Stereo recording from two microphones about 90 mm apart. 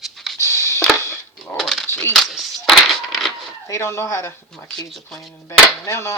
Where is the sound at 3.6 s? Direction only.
35° left (ahead or behind).